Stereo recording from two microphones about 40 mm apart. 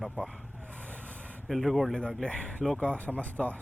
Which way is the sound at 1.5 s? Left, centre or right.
Centre.